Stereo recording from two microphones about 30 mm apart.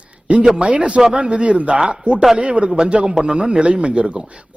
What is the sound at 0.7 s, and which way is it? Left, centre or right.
A woman's voice, right.